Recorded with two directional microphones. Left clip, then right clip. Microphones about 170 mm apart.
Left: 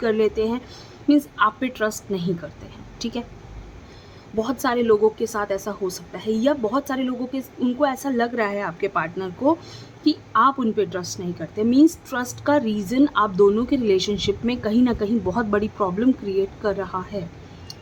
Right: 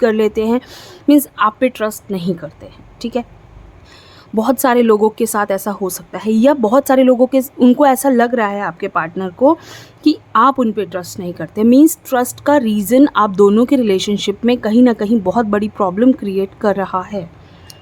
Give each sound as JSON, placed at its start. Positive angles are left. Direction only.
{"t": 0.0, "sound": "a woman's voice", "side_deg": -45}
{"t": 4.4, "sound": "a woman's voice", "side_deg": -60}
{"t": 10.0, "sound": "a woman's voice", "side_deg": -50}
{"t": 10.8, "sound": "a woman's voice", "side_deg": -35}